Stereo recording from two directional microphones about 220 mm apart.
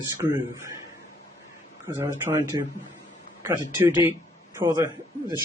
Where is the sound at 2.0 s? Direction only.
10° right (ahead or behind).